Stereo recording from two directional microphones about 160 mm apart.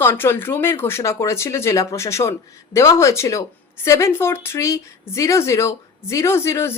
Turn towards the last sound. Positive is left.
turn(degrees=15)  # may be behind; listen again after turning